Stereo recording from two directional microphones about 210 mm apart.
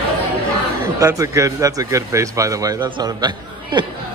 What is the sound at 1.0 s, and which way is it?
Speech, 15° right (ahead or behind).